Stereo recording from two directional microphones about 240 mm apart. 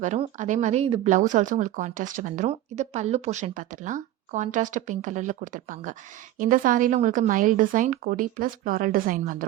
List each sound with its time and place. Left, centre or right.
0.0 s speech: right